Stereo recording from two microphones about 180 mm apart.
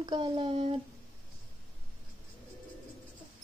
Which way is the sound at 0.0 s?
25° right (ahead or behind).